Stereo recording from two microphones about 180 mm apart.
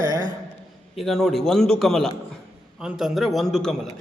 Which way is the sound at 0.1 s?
20° right (ahead or behind).